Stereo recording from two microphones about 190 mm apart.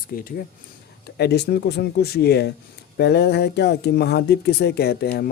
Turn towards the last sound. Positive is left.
turn(degrees=55)  # may be behind; listen again after turning